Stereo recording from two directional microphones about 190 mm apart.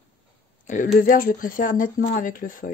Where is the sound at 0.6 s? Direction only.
40° left (ahead or behind).